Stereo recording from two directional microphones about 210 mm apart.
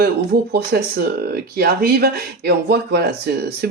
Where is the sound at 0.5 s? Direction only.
45° right (ahead or behind).